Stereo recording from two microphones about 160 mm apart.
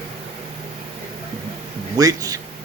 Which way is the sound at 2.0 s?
20° right (ahead or behind).